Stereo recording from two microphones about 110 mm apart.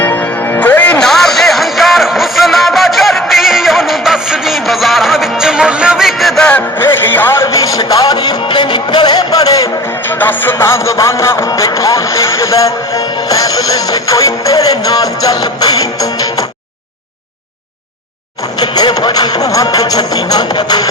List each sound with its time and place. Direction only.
0.0 s music: 20° left (ahead or behind)
6.7 s music: 20° left (ahead or behind)
10.2 s music: 20° left (ahead or behind); by 16.0 s 35° left (ahead or behind)
18.6 s music: 40° left (ahead or behind)